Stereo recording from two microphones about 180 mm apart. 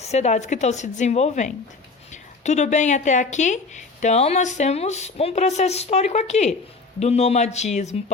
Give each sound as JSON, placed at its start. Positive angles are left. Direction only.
{"t": 0.0, "sound": "a woman's voice", "side_deg": 40}